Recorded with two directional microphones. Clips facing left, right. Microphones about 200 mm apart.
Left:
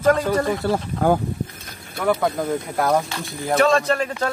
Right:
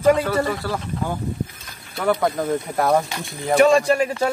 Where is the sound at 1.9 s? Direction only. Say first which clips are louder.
Even; centre (ahead or behind).